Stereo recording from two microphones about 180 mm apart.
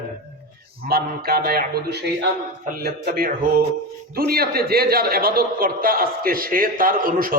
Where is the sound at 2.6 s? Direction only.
55° right (ahead or behind).